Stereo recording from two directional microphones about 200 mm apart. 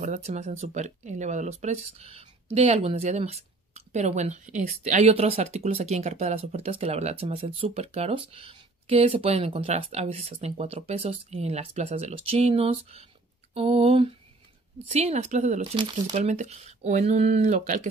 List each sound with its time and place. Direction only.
0.0 s speech: 35° right (ahead or behind)
13.6 s a sound: 30° right (ahead or behind)
14.9 s speech: 30° right (ahead or behind)
16.1 s speech: 35° right (ahead or behind)